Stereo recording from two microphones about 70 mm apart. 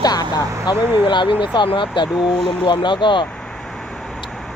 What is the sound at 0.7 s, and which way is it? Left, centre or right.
Speech, left.